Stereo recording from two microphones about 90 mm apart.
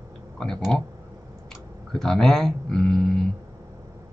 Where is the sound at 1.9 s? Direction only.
5° left (ahead or behind).